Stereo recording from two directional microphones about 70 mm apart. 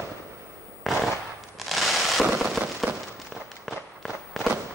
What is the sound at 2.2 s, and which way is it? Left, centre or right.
Fireworks, centre.